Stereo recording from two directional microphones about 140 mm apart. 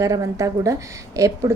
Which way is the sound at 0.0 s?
25° right (ahead or behind).